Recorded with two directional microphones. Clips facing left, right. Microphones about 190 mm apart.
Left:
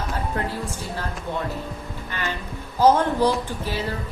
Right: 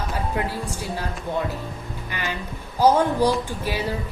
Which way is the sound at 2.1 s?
15° right (ahead or behind).